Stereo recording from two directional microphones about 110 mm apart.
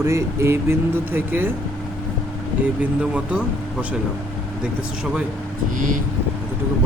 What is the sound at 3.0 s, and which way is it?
Speech, 10° right (ahead or behind).